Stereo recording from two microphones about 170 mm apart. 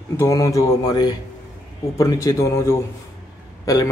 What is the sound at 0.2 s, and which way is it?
A man's voice, 20° left (ahead or behind).